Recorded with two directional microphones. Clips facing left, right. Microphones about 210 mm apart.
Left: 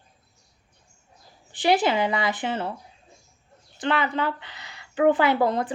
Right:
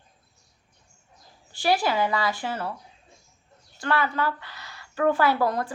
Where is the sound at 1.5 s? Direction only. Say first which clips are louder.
Left 3 dB; 20° left (ahead or behind).